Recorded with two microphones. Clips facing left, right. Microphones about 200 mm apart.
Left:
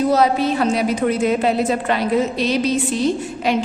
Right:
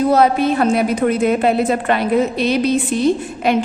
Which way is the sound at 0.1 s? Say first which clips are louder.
Right 2 dB; 55° right (ahead or behind).